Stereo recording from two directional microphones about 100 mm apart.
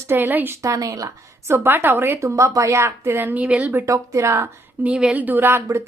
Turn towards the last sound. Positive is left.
turn(degrees=-25)  # may be behind; listen again after turning